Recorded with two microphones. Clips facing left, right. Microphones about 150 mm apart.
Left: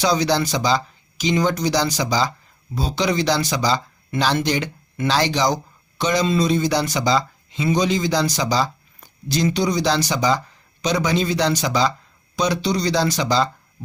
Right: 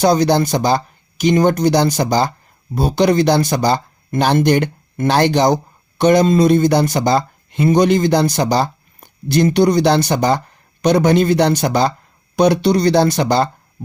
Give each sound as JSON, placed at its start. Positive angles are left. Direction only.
{"t": 0.0, "sound": "speech", "side_deg": -55}